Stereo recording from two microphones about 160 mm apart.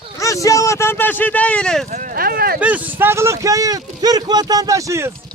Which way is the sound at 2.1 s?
70° right (ahead or behind).